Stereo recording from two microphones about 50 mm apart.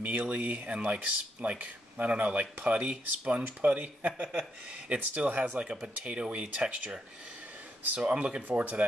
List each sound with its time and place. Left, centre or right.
0.0 s speech: right
4.3 s speech: right
8.0 s speech: right
8.5 s speech: right